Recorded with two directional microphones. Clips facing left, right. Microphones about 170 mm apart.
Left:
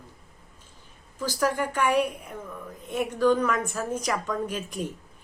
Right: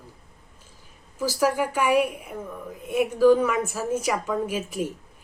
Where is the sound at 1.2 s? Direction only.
10° right (ahead or behind).